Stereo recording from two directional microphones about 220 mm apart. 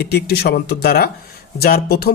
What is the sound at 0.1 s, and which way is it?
Speech, 45° left (ahead or behind).